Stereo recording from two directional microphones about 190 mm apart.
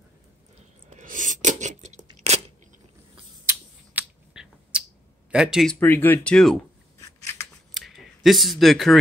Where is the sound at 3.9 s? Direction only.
5° right (ahead or behind).